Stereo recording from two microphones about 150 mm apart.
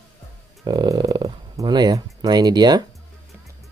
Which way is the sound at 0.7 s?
30° right (ahead or behind).